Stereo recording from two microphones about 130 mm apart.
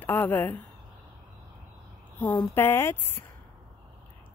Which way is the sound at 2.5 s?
15° left (ahead or behind).